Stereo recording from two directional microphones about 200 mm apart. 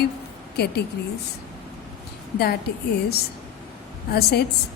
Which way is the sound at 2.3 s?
50° left (ahead or behind).